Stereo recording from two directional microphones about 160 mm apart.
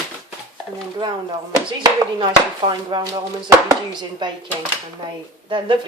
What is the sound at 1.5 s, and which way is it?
A woman's voice, 25° right (ahead or behind).